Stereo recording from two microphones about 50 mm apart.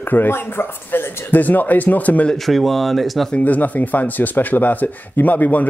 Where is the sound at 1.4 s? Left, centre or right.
Left.